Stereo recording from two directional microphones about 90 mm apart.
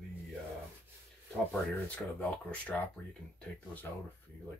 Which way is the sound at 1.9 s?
15° left (ahead or behind).